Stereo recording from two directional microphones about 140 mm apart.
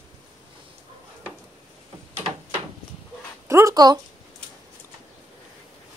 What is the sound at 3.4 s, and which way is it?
Speech, 20° right (ahead or behind).